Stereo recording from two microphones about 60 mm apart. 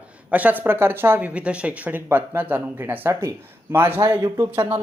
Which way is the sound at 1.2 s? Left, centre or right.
Right.